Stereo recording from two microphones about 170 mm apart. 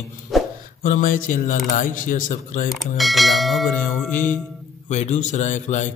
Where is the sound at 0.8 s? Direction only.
50° left (ahead or behind).